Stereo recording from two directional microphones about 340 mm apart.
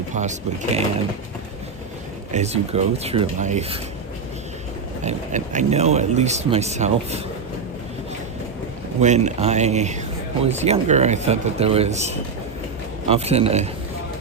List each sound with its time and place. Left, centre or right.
0.1 s speech: right
2.3 s speech: centre
5.0 s speech: right
9.0 s speech: centre
13.1 s a man's voice: centre